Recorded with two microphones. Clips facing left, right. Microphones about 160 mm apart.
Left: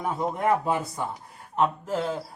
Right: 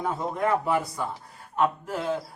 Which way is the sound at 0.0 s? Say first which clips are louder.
Left 1 dB; 25° left (ahead or behind).